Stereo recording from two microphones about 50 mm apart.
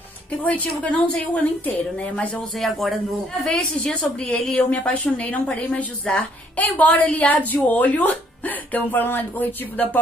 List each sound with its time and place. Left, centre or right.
0.4 s a woman's voice: left
2.6 s speech: centre
3.8 s a woman's voice: left